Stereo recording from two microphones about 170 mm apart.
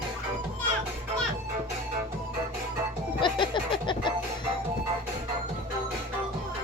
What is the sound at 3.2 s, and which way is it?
Music, 30° left (ahead or behind).